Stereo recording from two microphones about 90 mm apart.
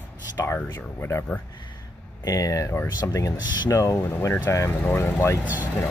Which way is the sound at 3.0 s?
30° left (ahead or behind).